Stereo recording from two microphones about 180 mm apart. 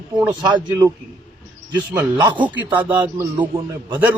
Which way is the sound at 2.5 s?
10° right (ahead or behind).